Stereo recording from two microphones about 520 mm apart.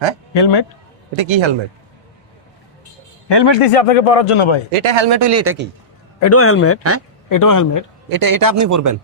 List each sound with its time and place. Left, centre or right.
1.1 s a man's voice: right
3.2 s a man's voice: left
3.6 s speech: left
4.7 s a man's voice: right
5.1 s speech: right
6.1 s a man's voice: left
7.3 s speech: left
8.1 s speech: right